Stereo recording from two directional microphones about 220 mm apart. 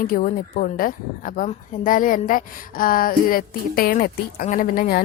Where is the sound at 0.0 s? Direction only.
40° left (ahead or behind).